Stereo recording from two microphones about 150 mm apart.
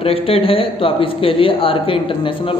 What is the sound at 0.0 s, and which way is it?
Speech, 40° left (ahead or behind).